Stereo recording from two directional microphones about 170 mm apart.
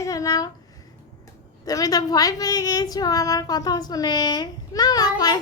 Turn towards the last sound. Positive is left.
turn(degrees=25)  # may be behind; listen again after turning